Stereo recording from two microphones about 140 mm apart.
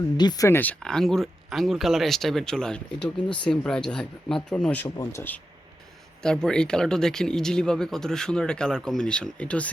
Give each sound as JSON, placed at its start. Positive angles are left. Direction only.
{"t": 0.2, "sound": "speech", "side_deg": 25}
{"t": 6.2, "sound": "speech", "side_deg": 5}